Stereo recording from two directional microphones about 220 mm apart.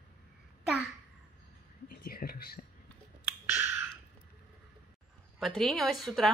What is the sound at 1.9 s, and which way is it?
Whispering, 40° left (ahead or behind).